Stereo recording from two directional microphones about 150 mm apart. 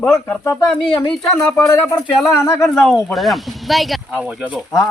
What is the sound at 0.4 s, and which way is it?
Speech, 15° left (ahead or behind).